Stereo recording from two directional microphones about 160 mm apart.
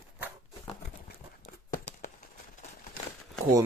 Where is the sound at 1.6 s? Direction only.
50° left (ahead or behind).